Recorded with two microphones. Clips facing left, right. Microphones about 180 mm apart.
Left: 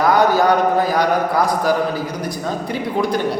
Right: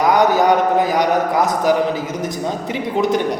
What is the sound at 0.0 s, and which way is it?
A man's voice, 20° right (ahead or behind).